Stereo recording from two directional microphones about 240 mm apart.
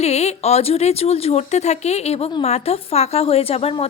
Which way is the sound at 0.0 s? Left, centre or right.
Left.